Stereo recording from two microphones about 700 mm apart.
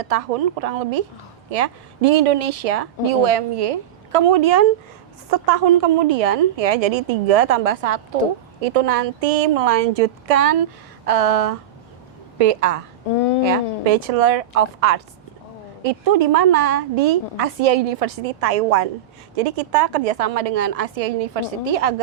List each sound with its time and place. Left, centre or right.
0.0 s a woman's voice: right
13.1 s speech: left
13.4 s a woman's voice: right